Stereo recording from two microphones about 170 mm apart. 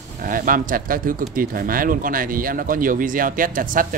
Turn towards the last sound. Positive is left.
turn(degrees=-50)  # may be behind; listen again after turning